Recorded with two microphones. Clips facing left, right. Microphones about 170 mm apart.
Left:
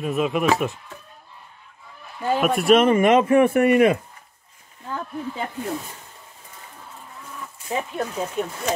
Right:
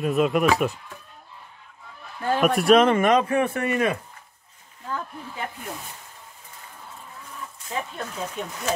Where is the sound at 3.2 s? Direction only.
25° left (ahead or behind).